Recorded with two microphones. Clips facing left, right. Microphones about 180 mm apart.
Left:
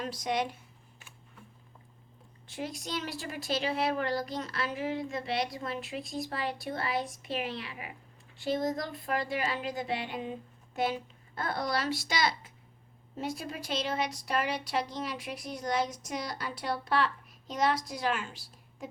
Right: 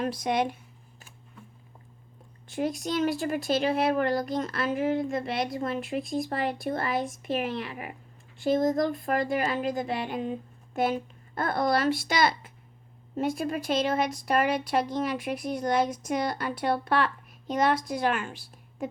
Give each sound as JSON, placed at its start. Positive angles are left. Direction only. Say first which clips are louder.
{"t": 0.0, "sound": "speech", "louder": "right 5 dB", "side_deg": -55}
{"t": 2.5, "sound": "a woman's voice", "louder": "right 8 dB", "side_deg": -50}